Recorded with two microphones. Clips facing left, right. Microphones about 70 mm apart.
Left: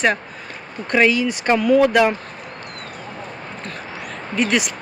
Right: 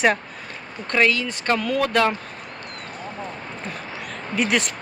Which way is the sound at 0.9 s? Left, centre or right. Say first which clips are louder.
Left 4 dB; centre.